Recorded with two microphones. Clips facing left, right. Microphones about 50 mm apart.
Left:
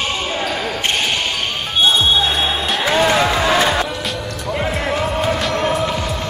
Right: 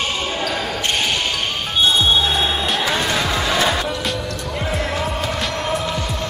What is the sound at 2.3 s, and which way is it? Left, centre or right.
Music, centre.